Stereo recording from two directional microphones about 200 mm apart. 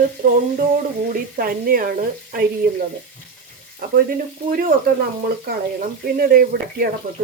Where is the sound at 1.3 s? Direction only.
45° right (ahead or behind).